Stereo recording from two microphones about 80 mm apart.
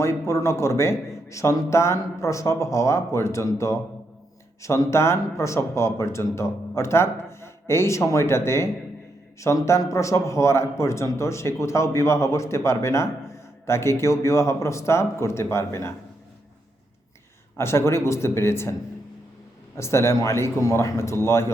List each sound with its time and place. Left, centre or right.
0.0 s a man's voice: left
17.6 s a man's voice: left
19.7 s a man's voice: left